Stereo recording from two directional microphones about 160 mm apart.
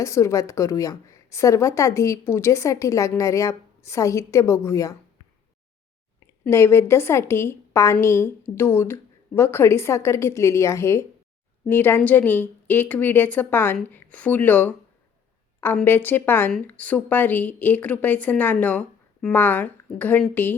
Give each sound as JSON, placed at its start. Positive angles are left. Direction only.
{"t": 0.0, "sound": "a woman's voice", "side_deg": 20}
{"t": 6.4, "sound": "speech", "side_deg": 15}